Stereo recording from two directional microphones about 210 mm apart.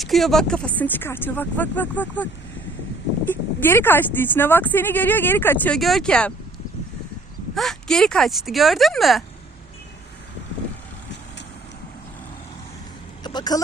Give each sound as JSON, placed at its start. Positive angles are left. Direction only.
{"t": 0.0, "sound": "speech", "side_deg": 0}
{"t": 3.2, "sound": "speech", "side_deg": 10}
{"t": 7.5, "sound": "speech", "side_deg": 0}
{"t": 13.2, "sound": "speech", "side_deg": 20}